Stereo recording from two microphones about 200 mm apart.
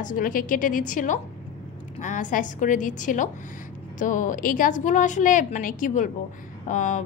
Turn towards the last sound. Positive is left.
turn(degrees=40)  # may be behind; listen again after turning